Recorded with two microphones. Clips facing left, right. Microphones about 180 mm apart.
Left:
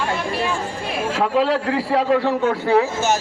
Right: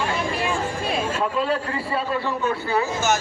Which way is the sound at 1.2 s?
85° left.